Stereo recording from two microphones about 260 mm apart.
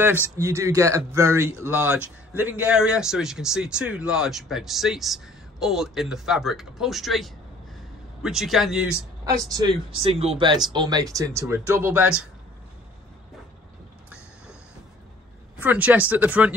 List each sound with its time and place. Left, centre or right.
0.0 s speech: centre
9.2 s speech: centre
15.6 s speech: centre